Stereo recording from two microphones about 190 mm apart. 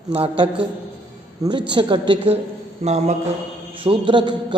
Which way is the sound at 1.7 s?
25° right (ahead or behind).